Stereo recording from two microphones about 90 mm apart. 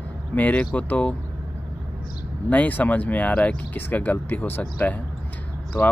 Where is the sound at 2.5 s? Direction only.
15° left (ahead or behind).